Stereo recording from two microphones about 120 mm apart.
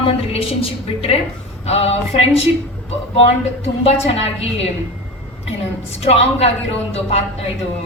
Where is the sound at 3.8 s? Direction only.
55° left (ahead or behind).